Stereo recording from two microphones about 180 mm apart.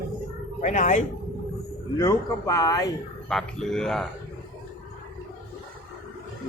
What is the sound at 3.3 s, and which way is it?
Speech, centre (ahead or behind).